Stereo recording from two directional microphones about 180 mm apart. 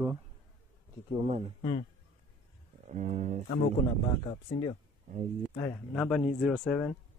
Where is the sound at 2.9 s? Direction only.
40° right (ahead or behind).